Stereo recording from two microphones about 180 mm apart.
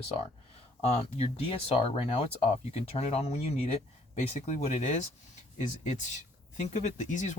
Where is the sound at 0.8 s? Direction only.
35° left (ahead or behind).